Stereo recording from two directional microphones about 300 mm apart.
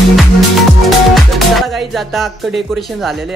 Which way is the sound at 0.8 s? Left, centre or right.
Centre.